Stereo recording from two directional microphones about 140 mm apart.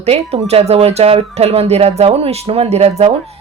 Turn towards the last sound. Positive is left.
turn(degrees=-50)  # may be behind; listen again after turning